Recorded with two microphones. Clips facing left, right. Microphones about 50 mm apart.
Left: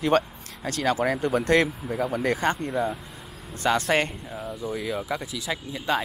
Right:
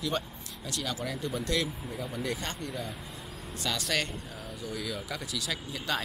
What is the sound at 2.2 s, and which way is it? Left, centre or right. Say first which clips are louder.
Speech: left 9 dB; left.